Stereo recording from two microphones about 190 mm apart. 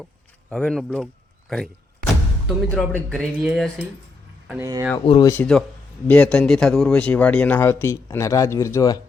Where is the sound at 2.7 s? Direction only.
5° left (ahead or behind).